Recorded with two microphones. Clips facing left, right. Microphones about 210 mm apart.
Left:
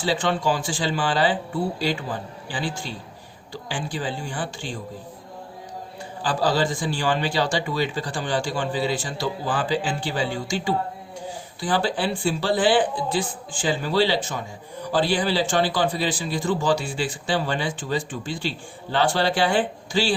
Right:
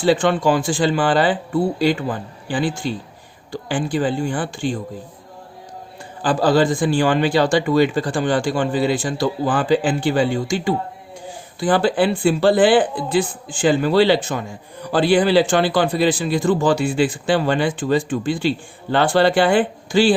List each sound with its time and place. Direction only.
0.0 s a man's voice: 55° right (ahead or behind)
6.2 s a man's voice: 55° right (ahead or behind)